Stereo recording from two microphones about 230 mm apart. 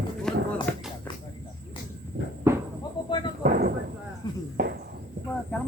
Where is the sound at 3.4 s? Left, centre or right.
Right.